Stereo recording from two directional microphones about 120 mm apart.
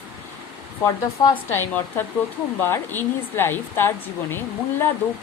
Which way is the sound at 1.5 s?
20° left (ahead or behind).